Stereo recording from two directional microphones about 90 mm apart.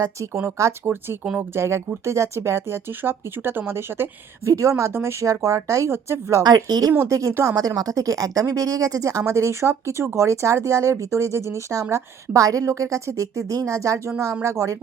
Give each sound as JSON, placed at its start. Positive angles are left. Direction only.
{"t": 0.3, "sound": "speech", "side_deg": -30}
{"t": 1.2, "sound": "speech", "side_deg": -10}
{"t": 1.5, "sound": "speech", "side_deg": -30}
{"t": 6.7, "sound": "speech", "side_deg": -45}
{"t": 7.1, "sound": "speech", "side_deg": -35}